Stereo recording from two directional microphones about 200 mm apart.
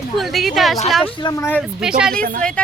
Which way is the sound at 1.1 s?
20° left (ahead or behind).